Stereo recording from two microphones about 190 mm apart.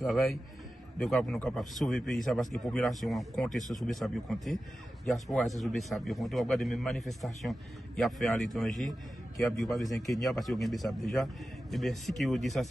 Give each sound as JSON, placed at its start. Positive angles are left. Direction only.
{"t": 0.0, "sound": "a man's voice", "side_deg": 0}